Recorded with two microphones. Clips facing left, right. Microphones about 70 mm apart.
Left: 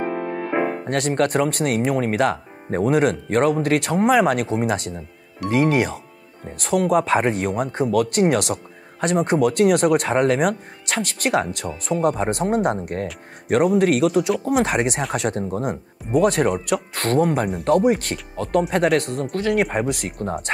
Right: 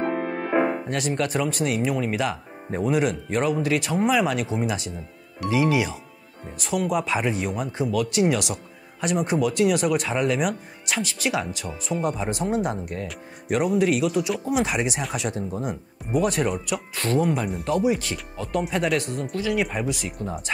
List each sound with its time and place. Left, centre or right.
0.8 s speech: left